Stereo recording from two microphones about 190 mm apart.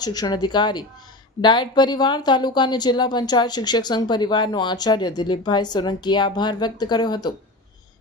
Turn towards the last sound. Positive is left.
turn(degrees=20)  # may be behind; listen again after turning